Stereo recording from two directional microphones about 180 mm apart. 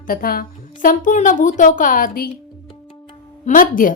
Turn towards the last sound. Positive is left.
turn(degrees=50)  # may be behind; listen again after turning